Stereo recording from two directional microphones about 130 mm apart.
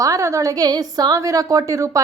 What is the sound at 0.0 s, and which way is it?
A woman's voice, 25° right (ahead or behind).